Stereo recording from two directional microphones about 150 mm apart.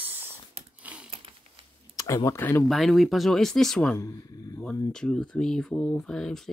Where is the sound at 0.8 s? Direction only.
10° right (ahead or behind).